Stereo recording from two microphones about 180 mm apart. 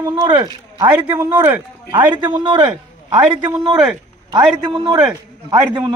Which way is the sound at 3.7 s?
5° right (ahead or behind).